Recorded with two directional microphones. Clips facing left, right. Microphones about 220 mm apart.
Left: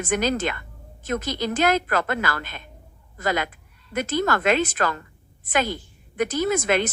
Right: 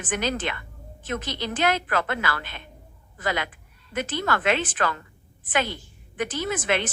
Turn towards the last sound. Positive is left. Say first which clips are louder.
# left 4 dB
turn(degrees=40)  # may be behind; listen again after turning